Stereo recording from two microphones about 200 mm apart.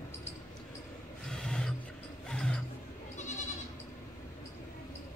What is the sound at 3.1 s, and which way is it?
Goat, 35° left (ahead or behind).